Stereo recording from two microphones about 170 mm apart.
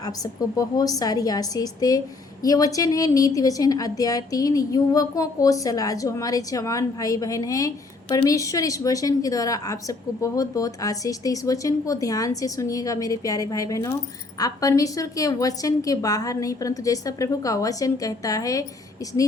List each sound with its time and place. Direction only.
0.5 s speech: 20° left (ahead or behind)